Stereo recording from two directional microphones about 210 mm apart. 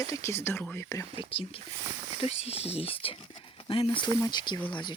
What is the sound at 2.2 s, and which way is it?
Speech, 30° left (ahead or behind).